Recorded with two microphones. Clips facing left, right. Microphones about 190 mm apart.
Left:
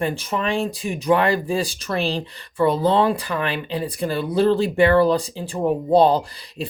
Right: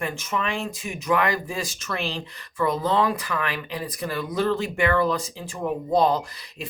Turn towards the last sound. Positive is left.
turn(degrees=30)  # may be behind; listen again after turning